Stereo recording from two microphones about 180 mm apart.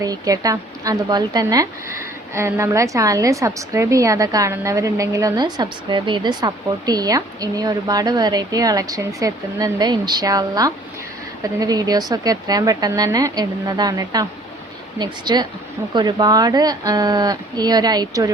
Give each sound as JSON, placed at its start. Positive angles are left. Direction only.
{"t": 0.0, "sound": "a woman's voice", "side_deg": -20}